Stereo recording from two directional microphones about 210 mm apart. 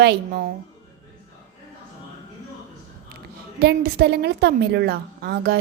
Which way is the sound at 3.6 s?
50° right (ahead or behind).